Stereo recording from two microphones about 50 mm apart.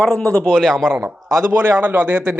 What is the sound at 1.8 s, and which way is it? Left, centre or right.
Speech, right.